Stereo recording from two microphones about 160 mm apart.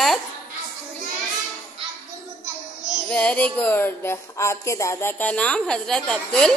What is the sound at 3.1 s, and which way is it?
A woman's voice, 10° left (ahead or behind).